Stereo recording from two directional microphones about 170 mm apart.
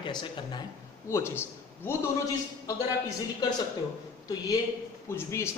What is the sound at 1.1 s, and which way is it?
Speech, 15° left (ahead or behind).